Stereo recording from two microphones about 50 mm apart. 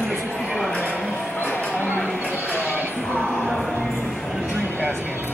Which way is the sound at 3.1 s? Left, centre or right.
Left.